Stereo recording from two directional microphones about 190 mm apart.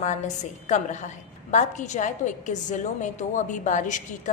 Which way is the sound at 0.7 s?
40° left (ahead or behind).